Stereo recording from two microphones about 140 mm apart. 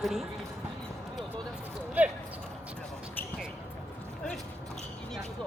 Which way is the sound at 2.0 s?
10° right (ahead or behind).